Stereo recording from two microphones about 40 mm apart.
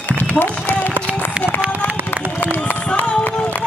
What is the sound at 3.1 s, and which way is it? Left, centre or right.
Run, left.